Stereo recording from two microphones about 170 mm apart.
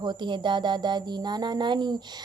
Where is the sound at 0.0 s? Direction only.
25° right (ahead or behind).